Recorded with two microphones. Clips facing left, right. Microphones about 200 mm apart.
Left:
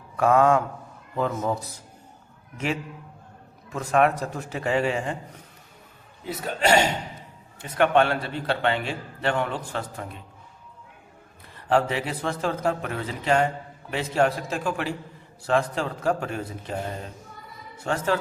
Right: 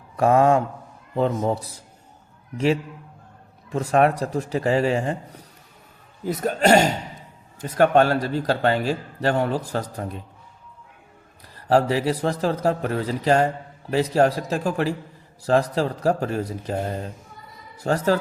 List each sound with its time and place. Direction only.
0.2 s a man's voice: 35° right (ahead or behind)
3.7 s a man's voice: 35° right (ahead or behind)
6.2 s a man's voice: 45° right (ahead or behind)
11.5 s a man's voice: 35° right (ahead or behind)